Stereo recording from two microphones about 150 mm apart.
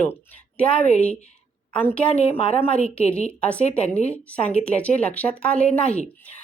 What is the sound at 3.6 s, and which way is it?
Speech, 45° left (ahead or behind).